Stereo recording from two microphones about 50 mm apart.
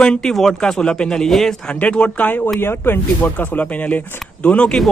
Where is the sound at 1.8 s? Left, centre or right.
Left.